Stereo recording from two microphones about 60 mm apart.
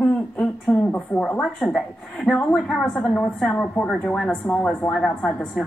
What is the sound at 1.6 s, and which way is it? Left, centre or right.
A woman's voice, centre.